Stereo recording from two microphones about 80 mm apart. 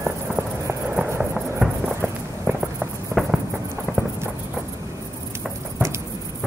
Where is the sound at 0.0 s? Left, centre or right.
Right.